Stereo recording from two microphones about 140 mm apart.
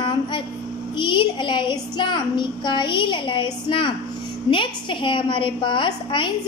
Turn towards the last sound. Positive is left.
turn(degrees=35)  # may be behind; listen again after turning